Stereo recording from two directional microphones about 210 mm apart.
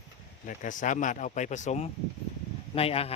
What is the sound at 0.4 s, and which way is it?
Speech, 35° left (ahead or behind).